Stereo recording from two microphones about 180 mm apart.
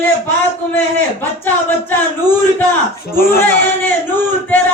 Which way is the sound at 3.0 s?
55° left (ahead or behind).